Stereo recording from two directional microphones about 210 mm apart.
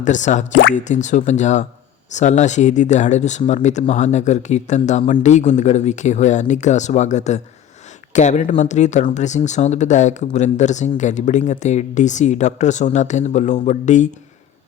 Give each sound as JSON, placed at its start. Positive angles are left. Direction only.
{"t": 0.0, "sound": "speech", "side_deg": 35}